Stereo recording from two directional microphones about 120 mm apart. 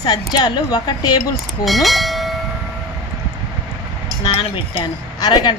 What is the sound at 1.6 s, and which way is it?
Speech, centre (ahead or behind).